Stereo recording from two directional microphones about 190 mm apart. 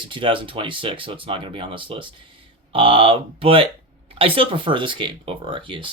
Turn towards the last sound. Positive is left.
turn(degrees=-25)  # may be behind; listen again after turning